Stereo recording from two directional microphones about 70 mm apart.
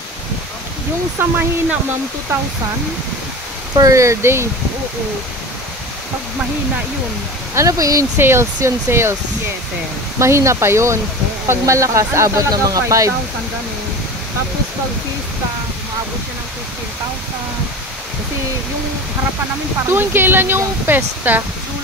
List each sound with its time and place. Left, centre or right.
1.2 s speech: right
3.9 s speech: right
7.5 s speech: right
8.2 s speech: right
10.1 s speech: right
19.9 s speech: right